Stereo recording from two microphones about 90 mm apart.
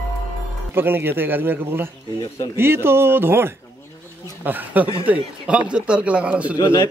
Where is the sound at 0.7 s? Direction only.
25° right (ahead or behind).